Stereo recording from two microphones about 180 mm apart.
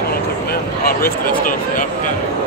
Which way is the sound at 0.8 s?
55° left (ahead or behind).